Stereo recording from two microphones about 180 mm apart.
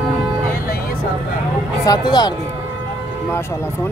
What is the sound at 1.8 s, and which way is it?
Speech, 20° left (ahead or behind).